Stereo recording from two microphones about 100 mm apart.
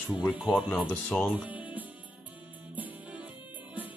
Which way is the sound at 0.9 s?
15° left (ahead or behind).